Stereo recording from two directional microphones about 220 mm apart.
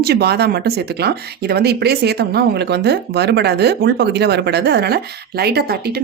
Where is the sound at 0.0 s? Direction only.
45° right (ahead or behind).